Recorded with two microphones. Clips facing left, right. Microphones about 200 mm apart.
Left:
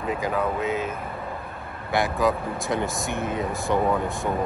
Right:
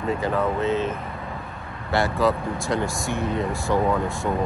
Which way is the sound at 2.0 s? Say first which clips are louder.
Right 1 dB; 15° left (ahead or behind).